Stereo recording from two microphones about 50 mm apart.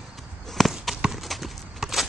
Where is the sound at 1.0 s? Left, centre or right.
Centre.